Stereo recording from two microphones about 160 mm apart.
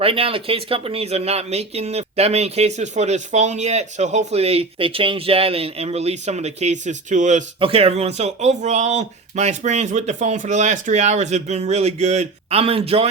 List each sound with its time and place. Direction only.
0.0 s speech: 35° right (ahead or behind)
7.6 s speech: 40° right (ahead or behind)